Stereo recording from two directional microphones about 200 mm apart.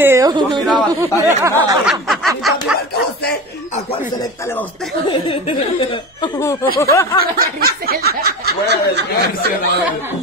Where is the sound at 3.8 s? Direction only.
25° left (ahead or behind).